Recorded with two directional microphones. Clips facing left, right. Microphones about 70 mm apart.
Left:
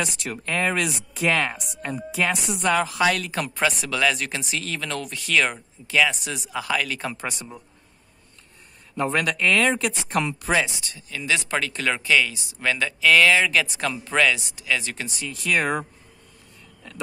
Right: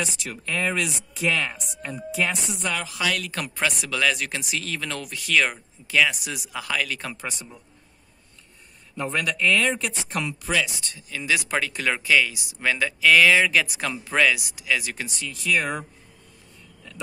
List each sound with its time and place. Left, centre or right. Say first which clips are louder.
0.0 s speech: left 2 dB; left
2.7 s speech: left 7 dB; left
3.5 s speech: left 2 dB; centre
8.9 s speech: left 3 dB; left
10.5 s speech: left 2 dB; left
10.8 s speech: even; centre
15.4 s speech: left 2 dB; left